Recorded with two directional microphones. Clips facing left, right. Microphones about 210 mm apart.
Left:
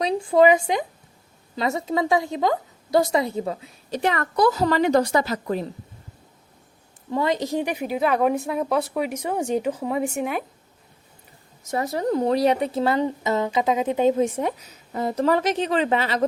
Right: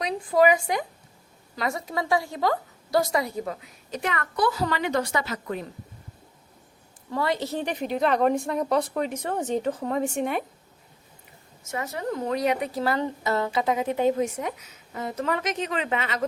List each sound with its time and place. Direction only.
0.0 s a woman's voice: 25° left (ahead or behind)
7.1 s a woman's voice: 20° left (ahead or behind); by 10.4 s 5° left (ahead or behind)
11.7 s speech: 35° left (ahead or behind)